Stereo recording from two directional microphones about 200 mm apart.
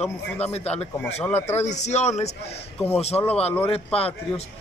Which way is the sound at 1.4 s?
35° left (ahead or behind).